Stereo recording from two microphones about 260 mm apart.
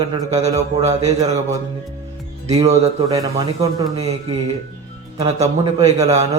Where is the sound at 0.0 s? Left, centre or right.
Centre.